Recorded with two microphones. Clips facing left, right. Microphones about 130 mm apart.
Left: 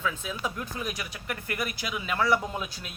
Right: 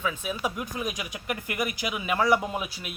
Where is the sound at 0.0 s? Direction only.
15° right (ahead or behind).